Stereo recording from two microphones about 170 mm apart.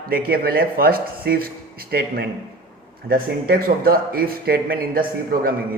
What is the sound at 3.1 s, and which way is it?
Speech, 60° right (ahead or behind).